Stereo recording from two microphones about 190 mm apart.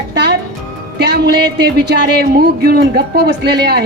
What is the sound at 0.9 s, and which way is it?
A woman's voice, 60° right (ahead or behind).